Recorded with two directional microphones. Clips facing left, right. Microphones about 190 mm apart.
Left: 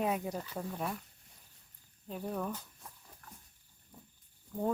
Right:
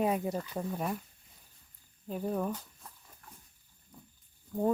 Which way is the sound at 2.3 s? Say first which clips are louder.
Right 4 dB; 15° right (ahead or behind).